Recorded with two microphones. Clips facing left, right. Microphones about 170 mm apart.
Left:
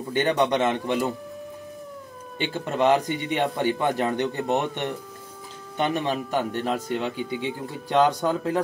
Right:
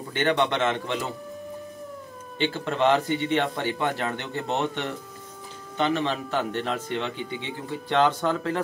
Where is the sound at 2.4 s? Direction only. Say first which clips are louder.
Even; 10° left (ahead or behind).